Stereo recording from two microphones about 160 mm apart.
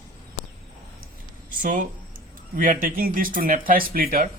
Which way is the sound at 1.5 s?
55° right (ahead or behind).